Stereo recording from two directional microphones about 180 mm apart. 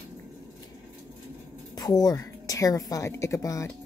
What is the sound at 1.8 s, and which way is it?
A woman's voice, 20° left (ahead or behind).